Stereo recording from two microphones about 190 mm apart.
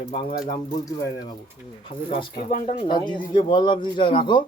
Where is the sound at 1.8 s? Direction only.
30° left (ahead or behind).